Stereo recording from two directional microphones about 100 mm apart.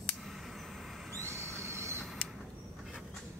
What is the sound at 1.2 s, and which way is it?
Train, 25° right (ahead or behind).